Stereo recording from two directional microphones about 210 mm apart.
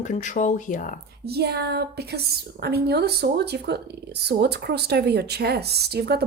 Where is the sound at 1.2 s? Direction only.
50° right (ahead or behind).